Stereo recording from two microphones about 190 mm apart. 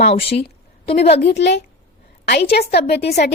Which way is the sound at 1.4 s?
65° left (ahead or behind).